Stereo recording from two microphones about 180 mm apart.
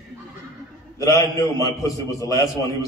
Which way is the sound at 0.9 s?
20° left (ahead or behind).